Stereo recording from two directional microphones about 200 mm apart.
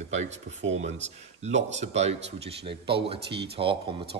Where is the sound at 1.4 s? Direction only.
35° right (ahead or behind).